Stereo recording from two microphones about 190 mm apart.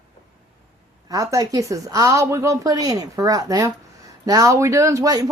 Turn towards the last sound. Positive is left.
turn(degrees=-20)  # may be behind; listen again after turning